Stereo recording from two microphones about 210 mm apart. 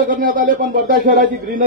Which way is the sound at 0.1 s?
40° right (ahead or behind).